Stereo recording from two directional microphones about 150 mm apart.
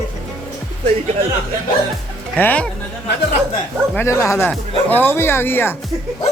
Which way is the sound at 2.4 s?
10° left (ahead or behind).